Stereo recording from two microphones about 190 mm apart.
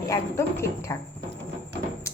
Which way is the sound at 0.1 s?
15° left (ahead or behind).